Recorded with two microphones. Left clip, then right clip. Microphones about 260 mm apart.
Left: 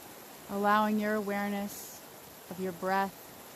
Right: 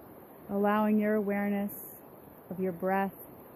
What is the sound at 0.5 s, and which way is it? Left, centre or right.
Speech, right.